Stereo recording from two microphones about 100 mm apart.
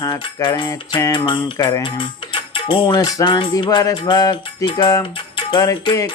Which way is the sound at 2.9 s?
40° left (ahead or behind).